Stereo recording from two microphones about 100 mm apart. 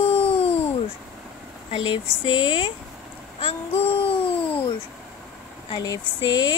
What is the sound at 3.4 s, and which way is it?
A child's voice, 70° left (ahead or behind).